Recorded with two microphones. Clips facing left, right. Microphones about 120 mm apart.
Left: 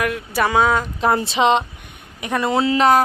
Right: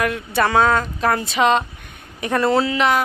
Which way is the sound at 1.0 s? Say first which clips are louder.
Left 2 dB; 25° left (ahead or behind).